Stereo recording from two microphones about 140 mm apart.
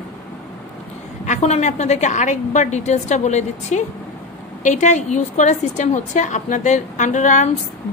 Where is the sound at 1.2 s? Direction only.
55° left (ahead or behind).